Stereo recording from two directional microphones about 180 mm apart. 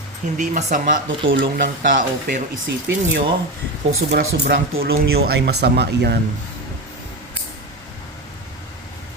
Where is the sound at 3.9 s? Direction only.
65° right (ahead or behind).